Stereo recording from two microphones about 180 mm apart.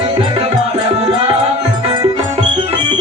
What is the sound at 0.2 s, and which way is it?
Music, 30° right (ahead or behind).